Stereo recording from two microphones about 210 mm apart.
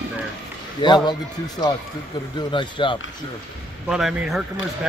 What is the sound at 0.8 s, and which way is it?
Speech, 20° left (ahead or behind).